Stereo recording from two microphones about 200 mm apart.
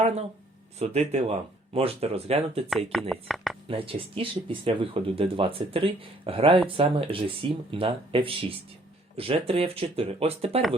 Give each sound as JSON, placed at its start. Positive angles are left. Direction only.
{"t": 0.8, "sound": "speech", "side_deg": -30}
{"t": 2.6, "sound": "speech", "side_deg": 0}
{"t": 3.7, "sound": "speech", "side_deg": -25}